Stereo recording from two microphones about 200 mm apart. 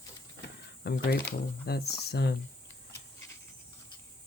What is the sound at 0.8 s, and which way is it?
Speech, 50° left (ahead or behind).